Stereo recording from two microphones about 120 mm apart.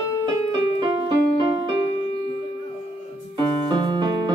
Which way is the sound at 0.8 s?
40° right (ahead or behind).